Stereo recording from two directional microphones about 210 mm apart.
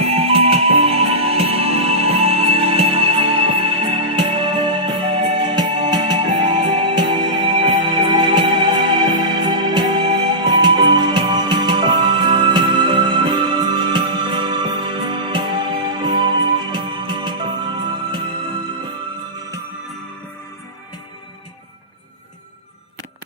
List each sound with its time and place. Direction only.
0.2 s music: 30° right (ahead or behind)